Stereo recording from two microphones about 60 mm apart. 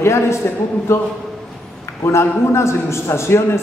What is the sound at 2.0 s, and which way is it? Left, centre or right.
A man's voice, left.